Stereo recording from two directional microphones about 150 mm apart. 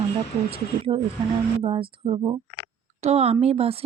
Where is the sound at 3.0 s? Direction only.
45° right (ahead or behind).